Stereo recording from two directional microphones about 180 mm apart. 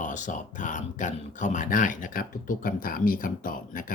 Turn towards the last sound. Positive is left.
turn(degrees=50)  # may be behind; listen again after turning